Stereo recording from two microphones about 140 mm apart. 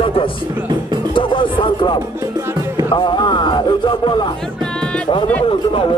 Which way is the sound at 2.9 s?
35° left (ahead or behind).